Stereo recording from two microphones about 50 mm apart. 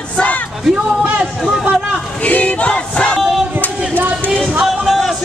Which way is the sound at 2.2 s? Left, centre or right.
Left.